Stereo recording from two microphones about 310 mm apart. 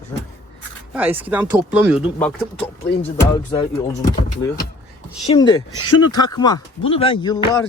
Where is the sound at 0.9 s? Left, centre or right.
Centre.